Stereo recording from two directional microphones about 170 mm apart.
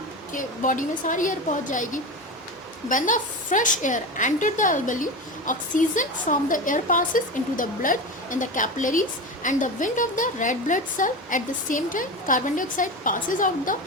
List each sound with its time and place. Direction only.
0.3 s a woman's voice: 50° left (ahead or behind)